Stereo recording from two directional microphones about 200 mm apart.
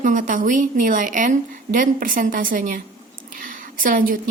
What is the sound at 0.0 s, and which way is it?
A woman's voice, 40° right (ahead or behind).